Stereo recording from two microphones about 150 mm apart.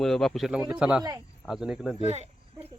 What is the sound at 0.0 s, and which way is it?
Speech, 5° left (ahead or behind).